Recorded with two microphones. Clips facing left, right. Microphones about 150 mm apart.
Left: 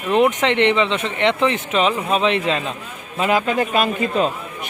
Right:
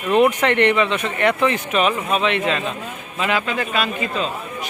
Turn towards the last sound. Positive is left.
turn(degrees=45)  # may be behind; listen again after turning